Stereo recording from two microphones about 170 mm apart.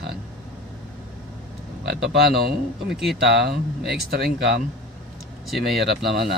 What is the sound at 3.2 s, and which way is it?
Speech, 85° right.